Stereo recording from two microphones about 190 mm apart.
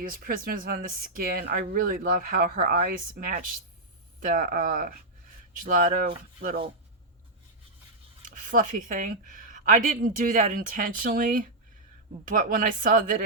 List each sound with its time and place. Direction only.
0.1 s speech: 50° right (ahead or behind)
8.3 s speech: 45° right (ahead or behind)